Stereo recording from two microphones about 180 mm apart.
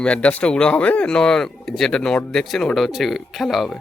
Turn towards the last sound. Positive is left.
turn(degrees=0)  # may be behind; listen again after turning